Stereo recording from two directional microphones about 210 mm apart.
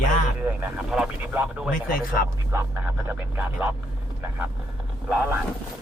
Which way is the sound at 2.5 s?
10° right (ahead or behind).